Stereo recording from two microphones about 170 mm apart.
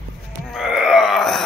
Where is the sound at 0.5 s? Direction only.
5° right (ahead or behind).